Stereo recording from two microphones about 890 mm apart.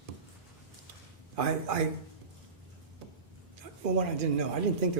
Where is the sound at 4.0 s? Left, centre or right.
Right.